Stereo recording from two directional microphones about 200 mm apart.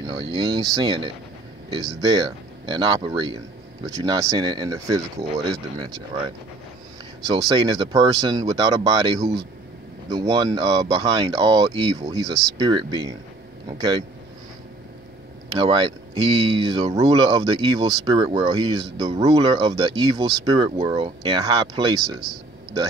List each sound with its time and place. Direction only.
0.0 s speech: 20° right (ahead or behind)
10.1 s speech: 20° right (ahead or behind)
15.6 s speech: 25° right (ahead or behind)